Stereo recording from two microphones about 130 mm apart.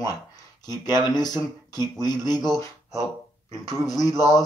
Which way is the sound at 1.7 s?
30° left (ahead or behind).